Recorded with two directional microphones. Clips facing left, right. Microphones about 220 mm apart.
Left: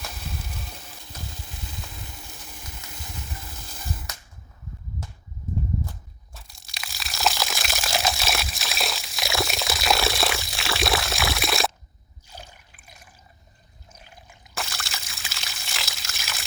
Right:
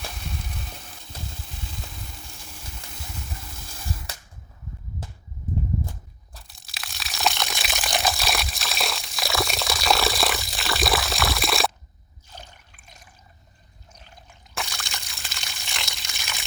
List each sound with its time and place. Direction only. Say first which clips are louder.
4.1 s cap gun: right 1 dB; 30° right (ahead or behind)
6.3 s a sound: even; centre (ahead or behind)
13.9 s trickle: left 1 dB; 10° left (ahead or behind)